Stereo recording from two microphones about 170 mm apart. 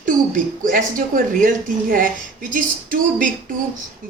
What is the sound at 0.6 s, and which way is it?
Speech, 55° right (ahead or behind).